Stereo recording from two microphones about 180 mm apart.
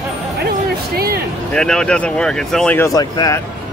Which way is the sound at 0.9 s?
60° right (ahead or behind).